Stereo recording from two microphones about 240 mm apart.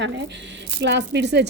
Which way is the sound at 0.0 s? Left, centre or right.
Right.